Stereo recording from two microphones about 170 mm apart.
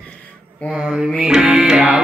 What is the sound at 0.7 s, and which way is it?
Mantra, 5° right (ahead or behind).